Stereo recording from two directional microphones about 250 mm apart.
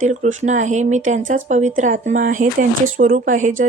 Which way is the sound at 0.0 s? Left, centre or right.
Right.